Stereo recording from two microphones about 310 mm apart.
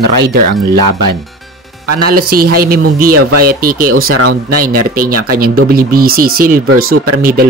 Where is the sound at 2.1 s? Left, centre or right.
Right.